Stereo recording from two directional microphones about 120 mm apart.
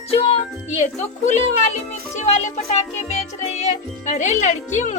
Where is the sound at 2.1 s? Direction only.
65° left (ahead or behind).